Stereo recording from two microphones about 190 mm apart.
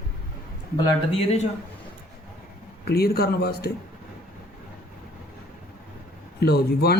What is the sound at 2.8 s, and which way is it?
Speech, 55° left (ahead or behind).